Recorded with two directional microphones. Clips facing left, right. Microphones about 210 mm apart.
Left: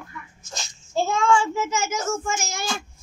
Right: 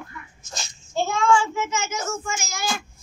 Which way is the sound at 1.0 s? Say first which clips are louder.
Even; 35° left (ahead or behind).